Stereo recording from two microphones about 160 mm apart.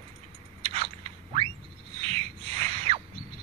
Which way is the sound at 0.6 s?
35° right (ahead or behind).